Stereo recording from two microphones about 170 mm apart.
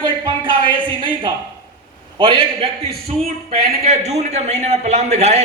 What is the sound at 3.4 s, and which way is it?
A man's voice, 40° right (ahead or behind).